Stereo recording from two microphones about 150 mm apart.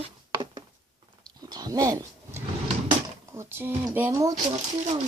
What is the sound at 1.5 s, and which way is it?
Speech, 25° right (ahead or behind).